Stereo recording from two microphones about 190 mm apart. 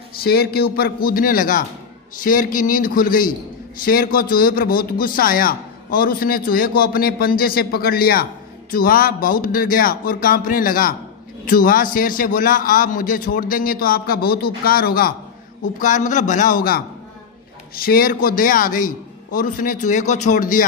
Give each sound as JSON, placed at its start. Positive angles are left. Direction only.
{"t": 0.1, "sound": "a man's voice", "side_deg": 55}
{"t": 15.8, "sound": "a man's voice", "side_deg": 40}